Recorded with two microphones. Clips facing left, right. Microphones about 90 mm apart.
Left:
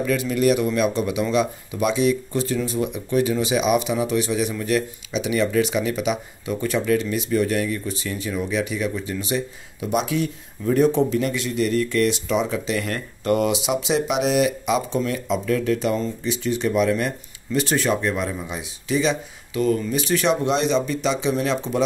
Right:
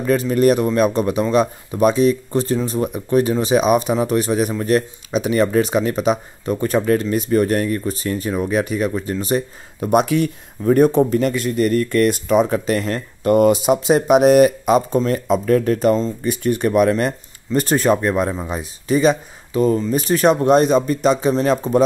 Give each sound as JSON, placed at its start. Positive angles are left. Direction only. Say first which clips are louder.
{"t": 0.0, "sound": "speech", "louder": "right 5 dB", "side_deg": -40}
{"t": 16.2, "sound": "speech", "louder": "right 5 dB", "side_deg": -55}